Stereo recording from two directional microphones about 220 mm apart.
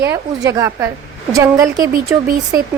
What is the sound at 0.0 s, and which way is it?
A woman's voice, 15° right (ahead or behind).